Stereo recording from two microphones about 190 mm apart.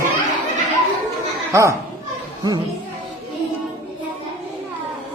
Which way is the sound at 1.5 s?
15° right (ahead or behind).